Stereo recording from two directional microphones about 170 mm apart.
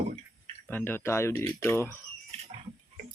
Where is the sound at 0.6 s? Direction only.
10° left (ahead or behind).